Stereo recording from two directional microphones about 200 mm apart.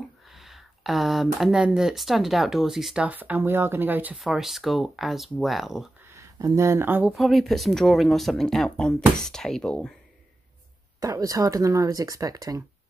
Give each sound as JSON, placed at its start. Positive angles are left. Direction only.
{"t": 0.3, "sound": "speech", "side_deg": 0}
{"t": 6.1, "sound": "speech", "side_deg": -15}
{"t": 11.0, "sound": "speech", "side_deg": -15}